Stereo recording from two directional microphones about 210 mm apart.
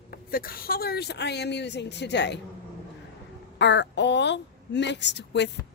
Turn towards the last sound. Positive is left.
turn(degrees=55)  # may be behind; listen again after turning